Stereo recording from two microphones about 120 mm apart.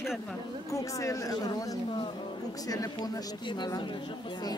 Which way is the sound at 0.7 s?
25° left (ahead or behind).